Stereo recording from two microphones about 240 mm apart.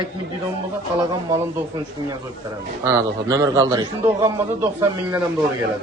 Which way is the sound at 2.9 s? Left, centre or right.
Centre.